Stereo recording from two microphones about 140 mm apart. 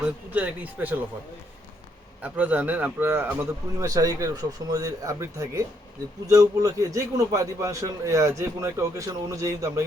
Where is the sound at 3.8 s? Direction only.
25° right (ahead or behind).